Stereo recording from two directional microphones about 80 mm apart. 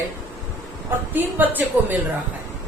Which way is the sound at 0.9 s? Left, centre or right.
Right.